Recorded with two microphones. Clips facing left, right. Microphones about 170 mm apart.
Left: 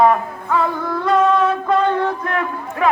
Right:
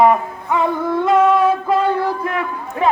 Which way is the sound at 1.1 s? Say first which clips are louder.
Right 1 dB; 10° right (ahead or behind).